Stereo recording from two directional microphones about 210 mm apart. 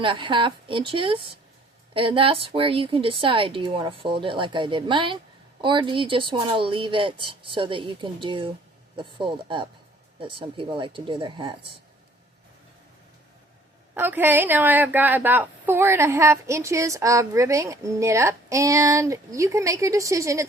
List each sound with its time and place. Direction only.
0.0 s speech: 25° right (ahead or behind)
13.9 s a woman's voice: 10° right (ahead or behind)